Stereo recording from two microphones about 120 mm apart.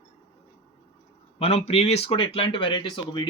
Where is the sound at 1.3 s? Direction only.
60° left (ahead or behind); by 3.3 s 40° left (ahead or behind).